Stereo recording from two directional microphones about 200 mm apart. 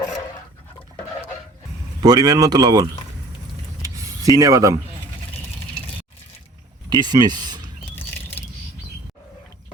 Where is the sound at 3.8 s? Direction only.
15° right (ahead or behind).